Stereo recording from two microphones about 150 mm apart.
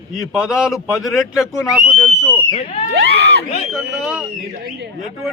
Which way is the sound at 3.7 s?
5° right (ahead or behind).